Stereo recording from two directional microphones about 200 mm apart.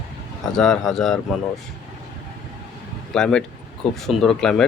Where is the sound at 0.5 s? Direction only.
Centre (ahead or behind).